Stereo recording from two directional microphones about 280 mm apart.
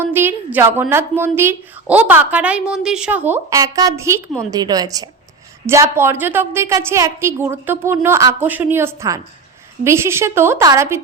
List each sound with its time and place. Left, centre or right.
0.0 s a woman's voice: centre